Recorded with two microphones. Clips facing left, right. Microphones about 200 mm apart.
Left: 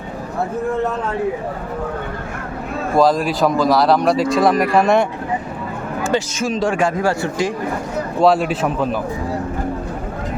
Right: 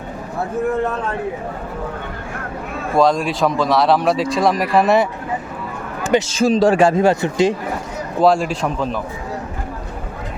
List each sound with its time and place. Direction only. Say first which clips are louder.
3.0 s a man's voice: even; centre (ahead or behind)
6.0 s a sound: right 3 dB; 15° right (ahead or behind)
6.3 s speech: right 5 dB; 35° right (ahead or behind)
7.0 s speech: right 4 dB; 20° right (ahead or behind)
8.2 s a man's voice: even; centre (ahead or behind)